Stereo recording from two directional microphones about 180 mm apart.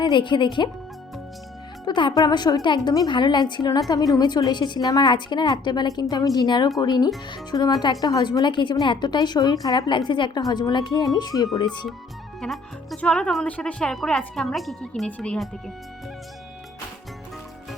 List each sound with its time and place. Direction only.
0.0 s speech: 25° left (ahead or behind)
1.8 s speech: 25° left (ahead or behind)
12.4 s speech: centre (ahead or behind)